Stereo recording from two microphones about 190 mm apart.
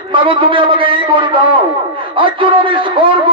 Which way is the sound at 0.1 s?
25° right (ahead or behind).